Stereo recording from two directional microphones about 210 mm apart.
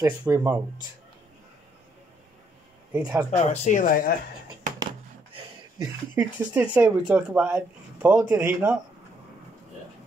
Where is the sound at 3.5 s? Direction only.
35° left (ahead or behind).